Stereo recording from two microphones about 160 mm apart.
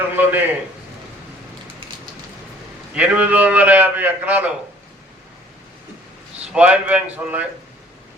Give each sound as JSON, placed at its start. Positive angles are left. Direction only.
{"t": 0.2, "sound": "a sound", "side_deg": -10}
{"t": 2.9, "sound": "a man's voice", "side_deg": -10}
{"t": 6.5, "sound": "a man's voice", "side_deg": -10}